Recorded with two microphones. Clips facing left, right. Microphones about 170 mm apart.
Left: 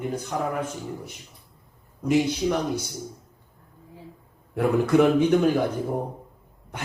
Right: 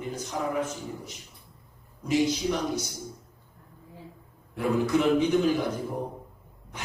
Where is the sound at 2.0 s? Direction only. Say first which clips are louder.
Left 3 dB; 55° left (ahead or behind).